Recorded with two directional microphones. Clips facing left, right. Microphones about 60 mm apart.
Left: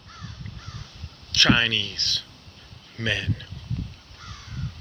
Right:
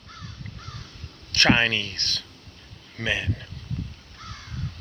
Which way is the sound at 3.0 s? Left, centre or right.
Right.